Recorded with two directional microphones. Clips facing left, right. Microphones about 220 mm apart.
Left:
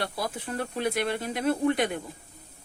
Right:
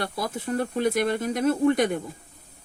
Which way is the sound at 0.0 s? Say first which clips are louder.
Right 3 dB; 45° right (ahead or behind).